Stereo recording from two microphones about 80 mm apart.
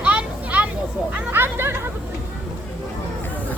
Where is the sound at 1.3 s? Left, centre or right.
Right.